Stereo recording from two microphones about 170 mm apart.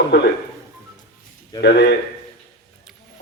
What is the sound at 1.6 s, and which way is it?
Speech, 75° left (ahead or behind).